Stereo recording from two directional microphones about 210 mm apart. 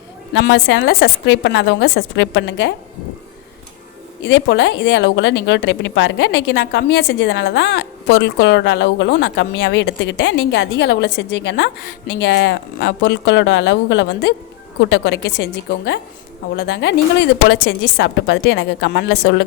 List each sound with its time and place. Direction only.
0.3 s a woman's voice: 55° left (ahead or behind)
4.2 s a woman's voice: 60° left (ahead or behind)